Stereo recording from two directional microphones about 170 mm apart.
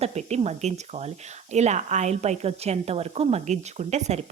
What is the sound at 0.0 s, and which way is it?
A woman's voice, 40° right (ahead or behind).